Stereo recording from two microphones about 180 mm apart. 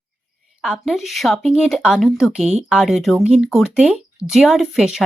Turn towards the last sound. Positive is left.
turn(degrees=0)  # may be behind; listen again after turning